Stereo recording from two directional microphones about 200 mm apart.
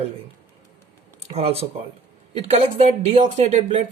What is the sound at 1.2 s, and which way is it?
Speech, 30° right (ahead or behind).